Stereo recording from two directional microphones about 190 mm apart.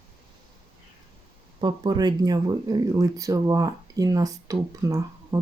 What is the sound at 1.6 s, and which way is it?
Speech, 20° right (ahead or behind).